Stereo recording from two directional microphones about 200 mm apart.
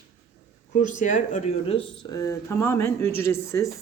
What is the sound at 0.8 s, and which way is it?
Speech, 40° left (ahead or behind).